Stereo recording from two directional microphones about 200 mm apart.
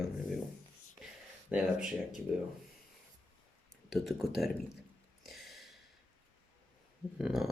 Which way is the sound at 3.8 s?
Centre (ahead or behind).